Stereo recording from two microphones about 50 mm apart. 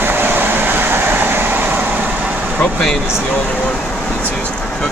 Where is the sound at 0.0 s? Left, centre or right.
Right.